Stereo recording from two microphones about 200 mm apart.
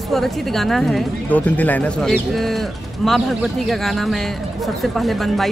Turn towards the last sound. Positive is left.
turn(degrees=0)  # may be behind; listen again after turning